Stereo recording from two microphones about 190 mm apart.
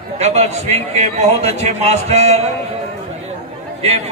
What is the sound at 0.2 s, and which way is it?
Speech, 35° right (ahead or behind).